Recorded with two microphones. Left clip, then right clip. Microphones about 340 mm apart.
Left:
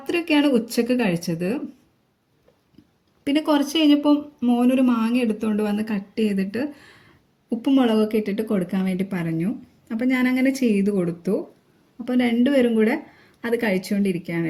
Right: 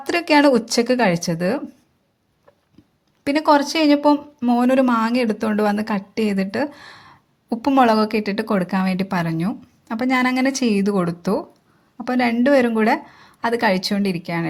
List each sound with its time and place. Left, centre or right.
0.0 s speech: centre
3.2 s a woman's voice: centre